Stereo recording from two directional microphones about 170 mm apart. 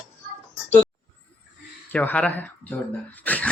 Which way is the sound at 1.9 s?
10° left (ahead or behind).